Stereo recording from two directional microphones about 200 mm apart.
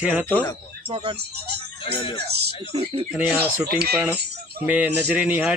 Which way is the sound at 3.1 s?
5° right (ahead or behind).